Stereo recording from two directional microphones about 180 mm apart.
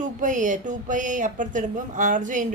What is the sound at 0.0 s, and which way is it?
A woman's voice, 45° right (ahead or behind).